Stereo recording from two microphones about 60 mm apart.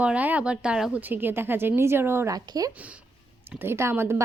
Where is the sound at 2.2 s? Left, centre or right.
Right.